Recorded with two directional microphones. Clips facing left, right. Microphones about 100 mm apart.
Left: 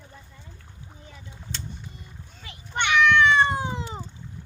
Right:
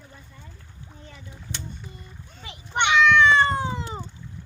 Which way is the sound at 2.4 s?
20° right (ahead or behind).